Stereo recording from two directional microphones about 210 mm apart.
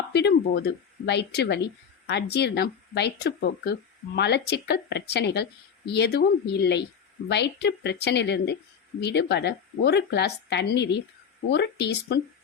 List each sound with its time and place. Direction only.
0.1 s speech: 55° left (ahead or behind)